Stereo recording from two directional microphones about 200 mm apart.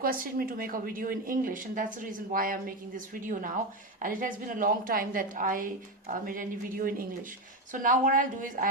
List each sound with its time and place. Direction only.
0.0 s a woman's voice: 45° right (ahead or behind)